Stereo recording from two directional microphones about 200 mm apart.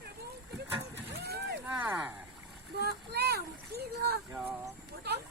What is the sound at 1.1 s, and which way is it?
Vehicle, 55° right (ahead or behind).